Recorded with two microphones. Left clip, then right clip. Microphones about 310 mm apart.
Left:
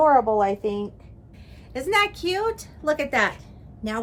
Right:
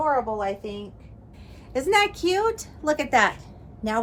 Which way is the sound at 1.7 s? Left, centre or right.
Centre.